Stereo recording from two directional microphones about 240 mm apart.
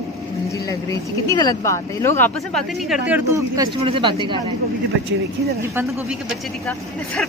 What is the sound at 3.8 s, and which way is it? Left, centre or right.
Speech, right.